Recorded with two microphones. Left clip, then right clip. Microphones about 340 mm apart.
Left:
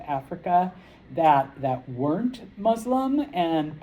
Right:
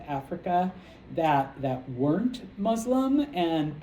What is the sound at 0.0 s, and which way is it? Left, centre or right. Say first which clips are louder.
Speech: left 3 dB; centre.